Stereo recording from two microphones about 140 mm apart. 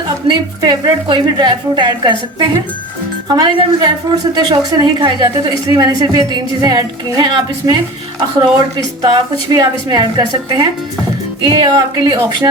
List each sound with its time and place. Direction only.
0.3 s a woman's voice: 30° right (ahead or behind)
9.0 s a woman's voice: 30° right (ahead or behind)